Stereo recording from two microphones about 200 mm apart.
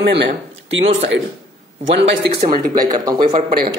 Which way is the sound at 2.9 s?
20° right (ahead or behind).